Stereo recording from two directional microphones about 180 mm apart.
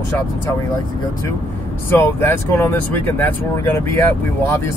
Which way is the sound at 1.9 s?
10° left (ahead or behind).